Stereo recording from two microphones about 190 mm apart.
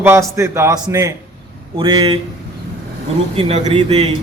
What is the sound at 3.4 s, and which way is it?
Speech, 35° right (ahead or behind).